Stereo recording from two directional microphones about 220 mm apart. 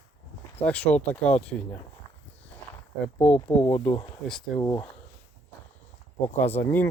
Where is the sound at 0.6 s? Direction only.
5° left (ahead or behind).